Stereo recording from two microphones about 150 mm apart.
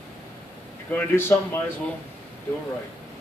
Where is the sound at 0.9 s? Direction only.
15° left (ahead or behind).